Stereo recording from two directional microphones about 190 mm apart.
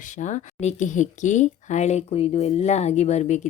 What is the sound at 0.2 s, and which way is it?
Speech, 40° left (ahead or behind).